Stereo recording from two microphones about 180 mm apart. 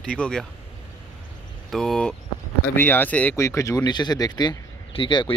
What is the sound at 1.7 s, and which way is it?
Speech, centre (ahead or behind).